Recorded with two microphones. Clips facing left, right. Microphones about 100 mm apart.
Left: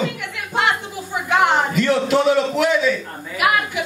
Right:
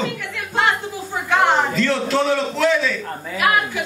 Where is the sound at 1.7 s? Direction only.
15° left (ahead or behind).